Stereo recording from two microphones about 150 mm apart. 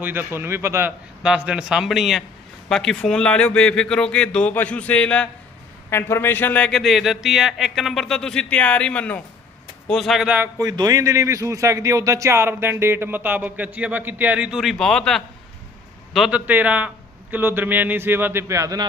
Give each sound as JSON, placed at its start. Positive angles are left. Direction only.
{"t": 0.0, "sound": "speech", "side_deg": -15}
{"t": 1.2, "sound": "speech", "side_deg": -5}
{"t": 10.6, "sound": "speech", "side_deg": -25}